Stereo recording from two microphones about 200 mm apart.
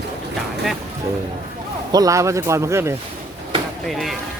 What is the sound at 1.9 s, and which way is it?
Speech, 15° right (ahead or behind).